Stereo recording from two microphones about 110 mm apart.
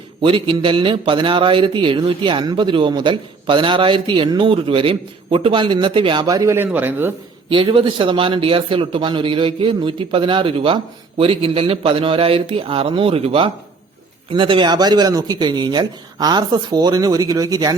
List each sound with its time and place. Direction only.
0.2 s a man's voice: 50° right (ahead or behind)
6.2 s speech: 30° right (ahead or behind)
6.7 s speech: 15° right (ahead or behind)
7.5 s a man's voice: 50° right (ahead or behind); by 17.7 s 35° right (ahead or behind)